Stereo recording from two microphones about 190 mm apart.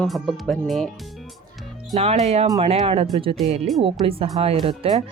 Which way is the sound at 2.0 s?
35° right (ahead or behind).